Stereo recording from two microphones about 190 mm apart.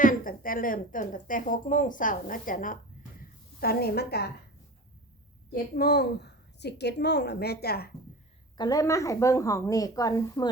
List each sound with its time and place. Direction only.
0.0 s a woman's voice: 45° left (ahead or behind)
3.2 s a sound: 55° left (ahead or behind)
5.5 s a woman's voice: 55° left (ahead or behind)
8.5 s speech: 20° left (ahead or behind)